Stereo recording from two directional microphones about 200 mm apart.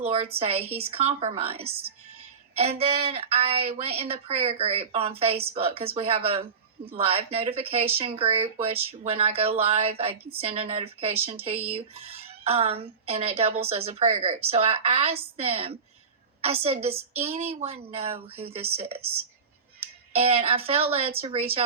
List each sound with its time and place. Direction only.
0.0 s a woman's voice: 30° right (ahead or behind)